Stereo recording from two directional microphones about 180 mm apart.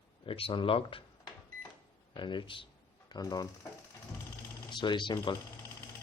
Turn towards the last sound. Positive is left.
turn(degrees=25)  # may be behind; listen again after turning